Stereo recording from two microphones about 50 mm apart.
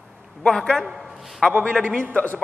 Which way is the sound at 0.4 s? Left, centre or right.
Centre.